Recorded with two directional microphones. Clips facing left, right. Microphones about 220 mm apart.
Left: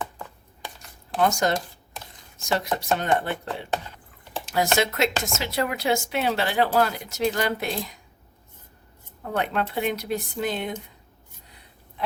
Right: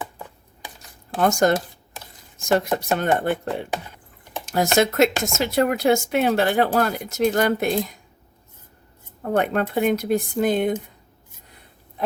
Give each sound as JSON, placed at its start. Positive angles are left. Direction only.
{"t": 1.2, "sound": "speech", "side_deg": -50}
{"t": 9.2, "sound": "speech", "side_deg": -50}